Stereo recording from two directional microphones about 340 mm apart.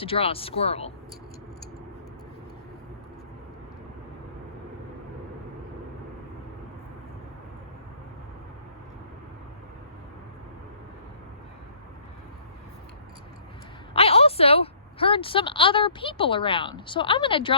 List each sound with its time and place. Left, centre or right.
0.0 s speech: centre
13.9 s a woman's voice: centre